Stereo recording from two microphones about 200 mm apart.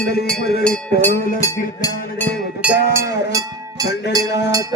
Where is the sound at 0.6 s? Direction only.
5° left (ahead or behind).